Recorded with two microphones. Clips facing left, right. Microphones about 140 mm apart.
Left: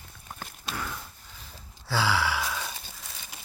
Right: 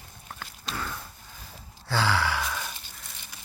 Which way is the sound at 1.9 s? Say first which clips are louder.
Even; 5° left (ahead or behind).